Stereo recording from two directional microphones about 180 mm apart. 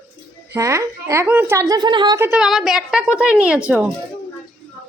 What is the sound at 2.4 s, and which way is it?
A woman's voice, centre (ahead or behind).